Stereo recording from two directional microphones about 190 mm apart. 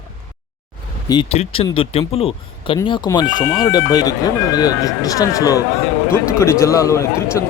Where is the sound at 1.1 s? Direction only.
30° left (ahead or behind).